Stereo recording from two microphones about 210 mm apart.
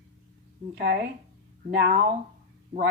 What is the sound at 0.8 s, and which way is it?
Speech, 50° right (ahead or behind).